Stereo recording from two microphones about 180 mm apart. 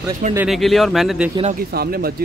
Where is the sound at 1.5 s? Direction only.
60° right (ahead or behind).